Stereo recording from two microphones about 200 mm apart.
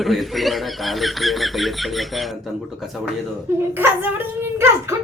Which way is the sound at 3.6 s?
10° right (ahead or behind).